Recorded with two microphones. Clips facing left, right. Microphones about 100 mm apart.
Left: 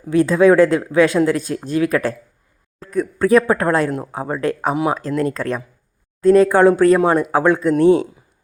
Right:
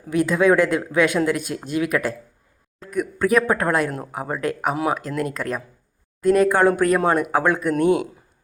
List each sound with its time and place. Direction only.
0.1 s speech: 30° left (ahead or behind)